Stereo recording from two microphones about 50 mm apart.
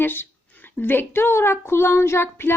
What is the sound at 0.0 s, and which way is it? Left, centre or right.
A woman's voice, left.